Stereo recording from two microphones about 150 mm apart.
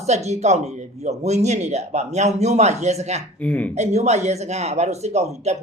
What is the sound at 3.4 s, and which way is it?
Speech, 10° left (ahead or behind).